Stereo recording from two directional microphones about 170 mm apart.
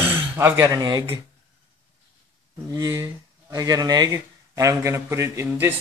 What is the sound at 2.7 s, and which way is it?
Speech, 20° right (ahead or behind).